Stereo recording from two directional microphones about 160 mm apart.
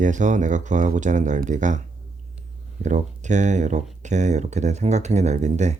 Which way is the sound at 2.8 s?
50° right (ahead or behind).